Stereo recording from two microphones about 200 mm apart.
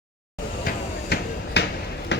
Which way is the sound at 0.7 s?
55° left (ahead or behind).